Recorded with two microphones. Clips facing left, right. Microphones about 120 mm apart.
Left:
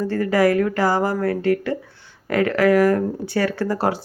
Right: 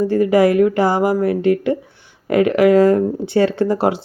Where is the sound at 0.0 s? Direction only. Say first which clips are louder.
Right 5 dB; 15° right (ahead or behind).